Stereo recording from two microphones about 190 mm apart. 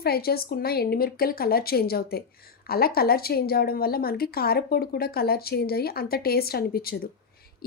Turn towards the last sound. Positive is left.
turn(degrees=50)  # may be behind; listen again after turning